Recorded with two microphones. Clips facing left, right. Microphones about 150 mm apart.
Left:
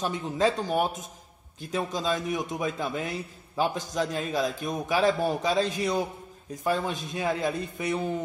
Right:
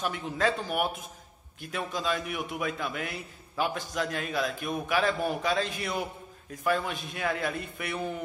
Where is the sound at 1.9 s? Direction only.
25° left (ahead or behind).